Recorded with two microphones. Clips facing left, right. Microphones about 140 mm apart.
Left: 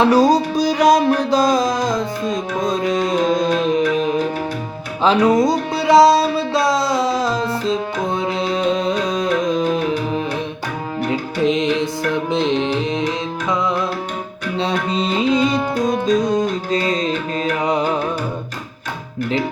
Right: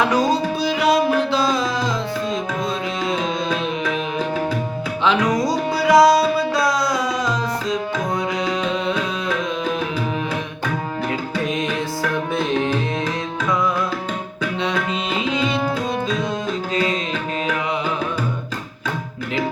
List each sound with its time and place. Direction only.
0.0 s music: 35° left (ahead or behind)
5.0 s music: 30° left (ahead or behind)
11.1 s music: 20° left (ahead or behind)
14.6 s tabla: 35° left (ahead or behind)
15.9 s music: 40° left (ahead or behind)